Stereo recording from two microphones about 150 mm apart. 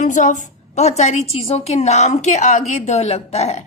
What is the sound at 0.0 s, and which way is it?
Speech, 55° left (ahead or behind).